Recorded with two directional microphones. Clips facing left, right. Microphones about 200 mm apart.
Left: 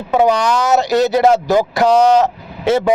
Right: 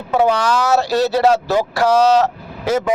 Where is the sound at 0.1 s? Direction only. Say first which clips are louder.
Left 2 dB; 15° left (ahead or behind).